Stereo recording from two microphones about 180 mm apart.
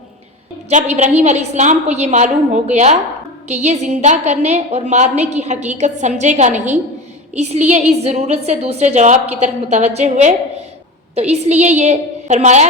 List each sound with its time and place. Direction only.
0.7 s a woman's voice: 40° right (ahead or behind)